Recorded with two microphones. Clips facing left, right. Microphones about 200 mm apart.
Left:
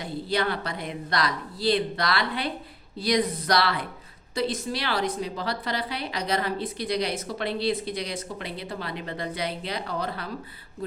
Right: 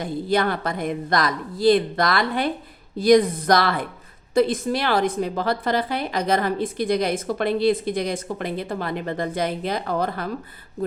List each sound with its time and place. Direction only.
0.0 s a woman's voice: 50° right (ahead or behind)